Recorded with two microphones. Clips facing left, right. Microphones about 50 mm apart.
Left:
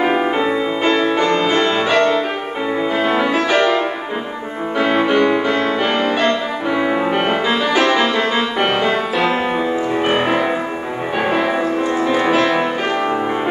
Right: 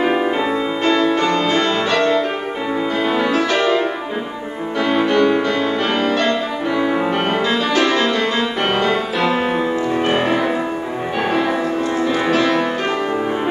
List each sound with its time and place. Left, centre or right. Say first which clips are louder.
0.4 s music: left 1 dB; centre
12.0 s music: left 1 dB; centre